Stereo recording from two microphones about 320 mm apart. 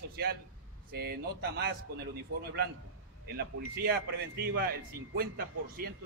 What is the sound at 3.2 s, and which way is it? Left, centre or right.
A man's voice, right.